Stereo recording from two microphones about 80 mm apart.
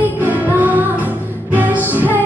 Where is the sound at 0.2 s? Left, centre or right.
Right.